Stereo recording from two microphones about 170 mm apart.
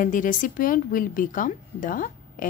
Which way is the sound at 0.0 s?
50° left (ahead or behind).